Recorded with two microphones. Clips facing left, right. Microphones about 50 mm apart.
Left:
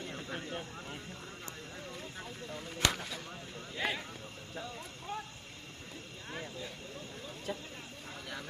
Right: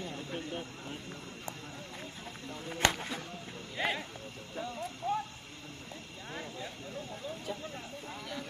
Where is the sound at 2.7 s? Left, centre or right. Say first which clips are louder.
Right 3 dB; right.